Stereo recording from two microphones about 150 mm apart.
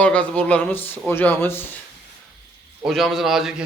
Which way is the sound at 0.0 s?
10° left (ahead or behind).